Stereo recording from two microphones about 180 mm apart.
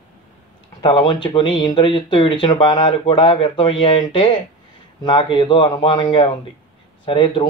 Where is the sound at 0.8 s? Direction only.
25° left (ahead or behind).